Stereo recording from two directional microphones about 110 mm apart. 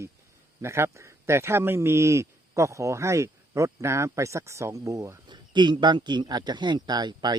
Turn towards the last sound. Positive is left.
turn(degrees=-40)  # may be behind; listen again after turning